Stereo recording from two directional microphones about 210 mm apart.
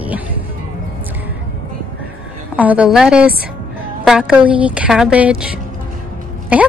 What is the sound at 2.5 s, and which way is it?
A woman's voice, 5° right (ahead or behind).